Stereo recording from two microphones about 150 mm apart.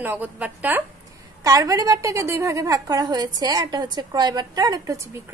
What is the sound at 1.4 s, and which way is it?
A woman's voice, 25° right (ahead or behind).